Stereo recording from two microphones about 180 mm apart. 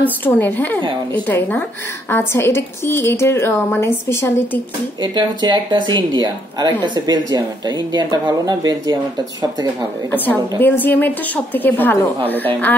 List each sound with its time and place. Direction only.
0.0 s a woman's voice: 10° left (ahead or behind)
5.0 s speech: 25° right (ahead or behind)
10.1 s a woman's voice: 10° left (ahead or behind)